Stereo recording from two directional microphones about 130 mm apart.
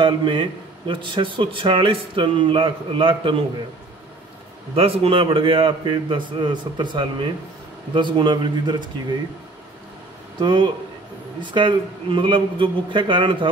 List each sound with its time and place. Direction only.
0.0 s a man's voice: 35° right (ahead or behind)
4.7 s a man's voice: 45° right (ahead or behind)
10.4 s a man's voice: 35° right (ahead or behind)